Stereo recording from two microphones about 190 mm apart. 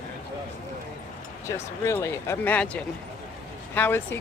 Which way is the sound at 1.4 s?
15° left (ahead or behind).